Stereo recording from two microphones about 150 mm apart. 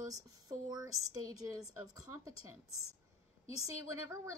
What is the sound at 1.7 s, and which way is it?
Speech, 20° right (ahead or behind).